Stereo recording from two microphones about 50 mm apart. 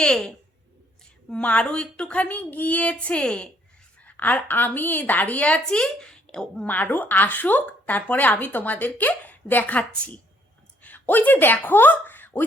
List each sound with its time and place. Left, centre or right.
0.0 s a woman's voice: centre
1.3 s a woman's voice: left
2.2 s speech: left
4.0 s speech: left
5.6 s a woman's voice: centre
6.7 s speech: left
10.8 s speech: left